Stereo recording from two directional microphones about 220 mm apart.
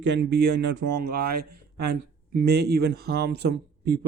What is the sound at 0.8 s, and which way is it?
Speech, 45° right (ahead or behind).